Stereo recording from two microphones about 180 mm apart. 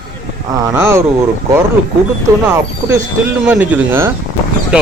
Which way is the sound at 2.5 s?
15° right (ahead or behind).